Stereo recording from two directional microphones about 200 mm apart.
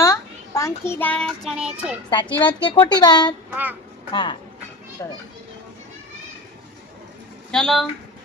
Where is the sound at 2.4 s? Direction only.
25° left (ahead or behind).